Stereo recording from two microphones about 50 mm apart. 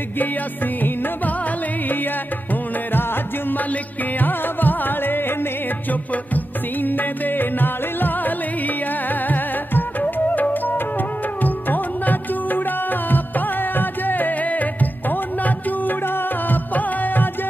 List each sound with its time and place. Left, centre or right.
0.8 s music: left
2.9 s music: left